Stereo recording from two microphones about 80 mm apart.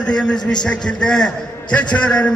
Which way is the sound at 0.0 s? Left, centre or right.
Centre.